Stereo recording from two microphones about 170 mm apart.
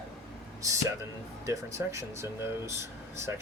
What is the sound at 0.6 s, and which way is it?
Speech, 20° right (ahead or behind).